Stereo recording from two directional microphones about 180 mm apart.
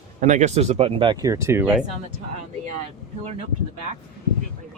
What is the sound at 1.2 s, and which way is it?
Speech, 15° right (ahead or behind).